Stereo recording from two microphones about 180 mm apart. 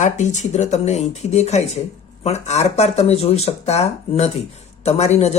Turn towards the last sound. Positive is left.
turn(degrees=40)  # may be behind; listen again after turning